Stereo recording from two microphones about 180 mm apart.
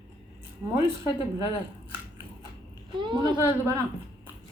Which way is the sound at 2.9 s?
25° right (ahead or behind).